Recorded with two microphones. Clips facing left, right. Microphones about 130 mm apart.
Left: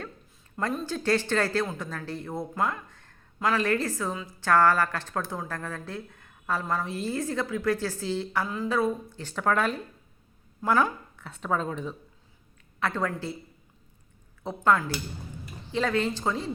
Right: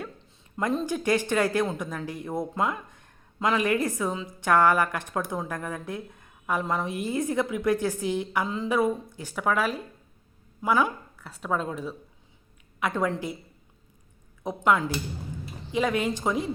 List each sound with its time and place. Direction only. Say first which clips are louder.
0.9 s a woman's voice: right 1 dB; 15° right (ahead or behind)
12.8 s speech: right 2 dB; 15° right (ahead or behind)
14.4 s speech: right 1 dB; 15° right (ahead or behind)